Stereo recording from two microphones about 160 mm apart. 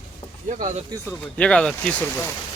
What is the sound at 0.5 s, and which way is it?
Speech, 50° right (ahead or behind).